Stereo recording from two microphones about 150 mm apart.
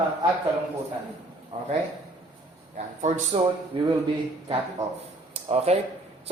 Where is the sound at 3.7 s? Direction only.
30° right (ahead or behind).